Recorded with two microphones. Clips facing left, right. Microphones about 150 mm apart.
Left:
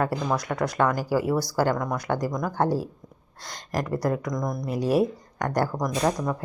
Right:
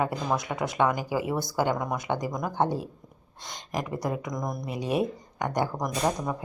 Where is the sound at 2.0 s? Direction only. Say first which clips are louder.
Left 4 dB; 15° right (ahead or behind).